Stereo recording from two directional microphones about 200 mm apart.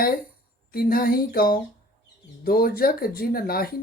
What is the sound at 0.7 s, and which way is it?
Speech, 45° left (ahead or behind).